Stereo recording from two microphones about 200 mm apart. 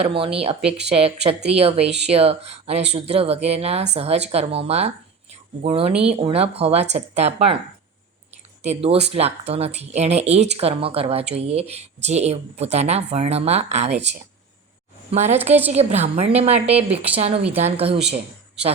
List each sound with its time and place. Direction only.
0.2 s speech: 30° right (ahead or behind)
8.6 s speech: 30° right (ahead or behind)
15.1 s speech: 35° right (ahead or behind)